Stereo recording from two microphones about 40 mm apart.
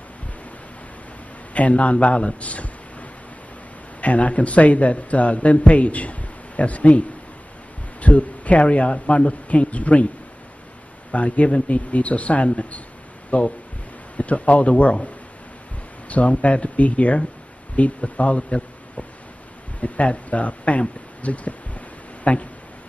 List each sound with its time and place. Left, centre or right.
1.5 s a man's voice: left
11.1 s a man's voice: left
16.1 s a man's voice: left
19.8 s a man's voice: left
21.2 s a sound: left